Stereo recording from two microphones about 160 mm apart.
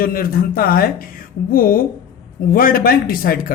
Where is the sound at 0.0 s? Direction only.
65° left (ahead or behind).